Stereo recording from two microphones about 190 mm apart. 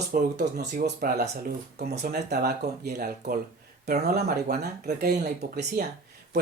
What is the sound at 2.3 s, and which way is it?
Speech, 55° right (ahead or behind).